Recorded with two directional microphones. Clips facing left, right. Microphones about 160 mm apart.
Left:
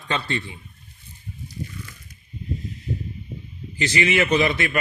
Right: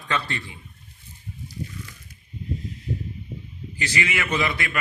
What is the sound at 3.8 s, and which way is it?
Speech, 20° left (ahead or behind).